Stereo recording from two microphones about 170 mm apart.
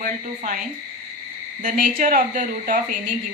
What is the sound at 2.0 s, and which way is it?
Speech, 50° right (ahead or behind).